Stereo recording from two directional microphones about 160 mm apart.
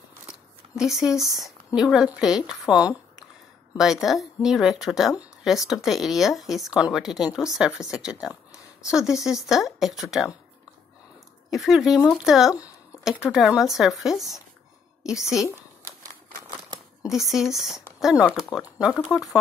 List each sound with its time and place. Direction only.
0.3 s a sound: 5° right (ahead or behind)
1.8 s a woman's voice: 5° right (ahead or behind)
2.7 s speech: 25° left (ahead or behind)
3.7 s a woman's voice: 5° right (ahead or behind)
11.5 s a woman's voice: centre (ahead or behind)
15.2 s speech: 20° left (ahead or behind)
17.1 s a woman's voice: centre (ahead or behind)